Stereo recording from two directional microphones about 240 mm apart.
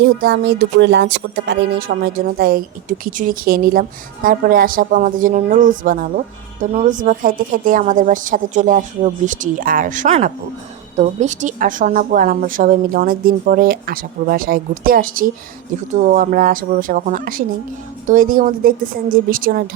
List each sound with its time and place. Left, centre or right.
0.0 s speech: right